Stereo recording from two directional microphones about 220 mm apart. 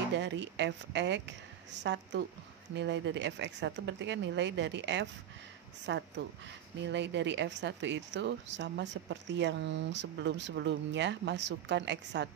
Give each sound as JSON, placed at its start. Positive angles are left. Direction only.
{"t": 0.2, "sound": "speech", "side_deg": -55}